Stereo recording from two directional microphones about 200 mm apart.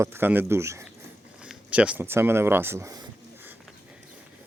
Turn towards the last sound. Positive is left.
turn(degrees=-15)  # may be behind; listen again after turning